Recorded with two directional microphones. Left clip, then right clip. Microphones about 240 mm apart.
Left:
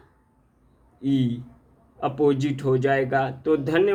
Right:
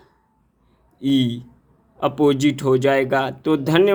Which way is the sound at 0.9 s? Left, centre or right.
Right.